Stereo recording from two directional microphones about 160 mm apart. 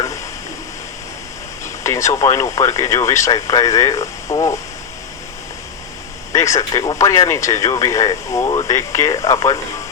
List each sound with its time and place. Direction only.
1.6 s speech: 20° left (ahead or behind)
6.3 s speech: 20° left (ahead or behind)